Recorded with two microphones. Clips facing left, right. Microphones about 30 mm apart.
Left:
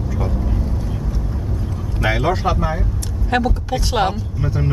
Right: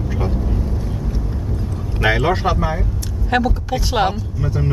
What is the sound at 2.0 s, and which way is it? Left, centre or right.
Speech, right.